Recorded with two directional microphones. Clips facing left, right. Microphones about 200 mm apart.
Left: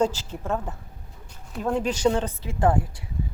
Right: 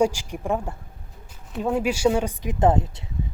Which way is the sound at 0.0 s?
10° right (ahead or behind).